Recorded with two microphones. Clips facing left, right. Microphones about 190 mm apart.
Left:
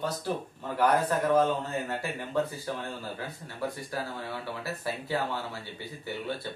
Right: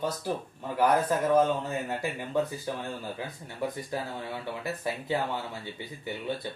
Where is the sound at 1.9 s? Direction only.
15° right (ahead or behind).